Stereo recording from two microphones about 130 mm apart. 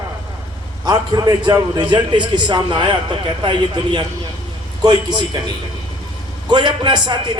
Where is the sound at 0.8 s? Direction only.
30° right (ahead or behind).